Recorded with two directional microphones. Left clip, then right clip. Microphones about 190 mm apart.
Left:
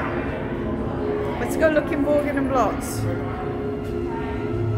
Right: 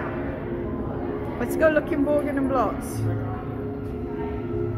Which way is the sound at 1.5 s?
30° right (ahead or behind).